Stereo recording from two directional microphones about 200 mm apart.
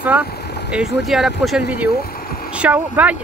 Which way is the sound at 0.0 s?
5° right (ahead or behind).